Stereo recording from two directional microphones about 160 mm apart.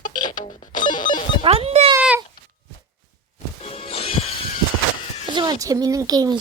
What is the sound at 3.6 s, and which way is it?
Music, 40° left (ahead or behind).